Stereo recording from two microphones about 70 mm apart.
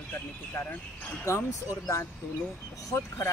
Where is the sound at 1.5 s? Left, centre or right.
Left.